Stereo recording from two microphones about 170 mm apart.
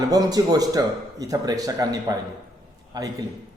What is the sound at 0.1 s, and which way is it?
A man's voice, 20° right (ahead or behind).